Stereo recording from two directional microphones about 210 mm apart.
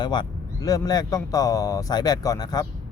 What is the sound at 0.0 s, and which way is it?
Speech, 20° left (ahead or behind).